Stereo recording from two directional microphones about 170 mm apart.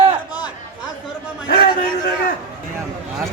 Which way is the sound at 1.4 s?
65° left (ahead or behind).